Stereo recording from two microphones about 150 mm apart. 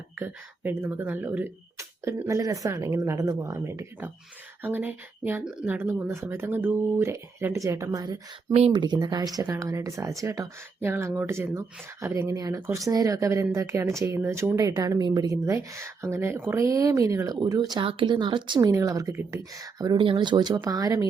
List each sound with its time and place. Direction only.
0.2 s speech: 15° right (ahead or behind)